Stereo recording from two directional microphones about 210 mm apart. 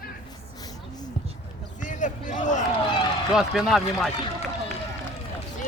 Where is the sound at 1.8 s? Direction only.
35° left (ahead or behind).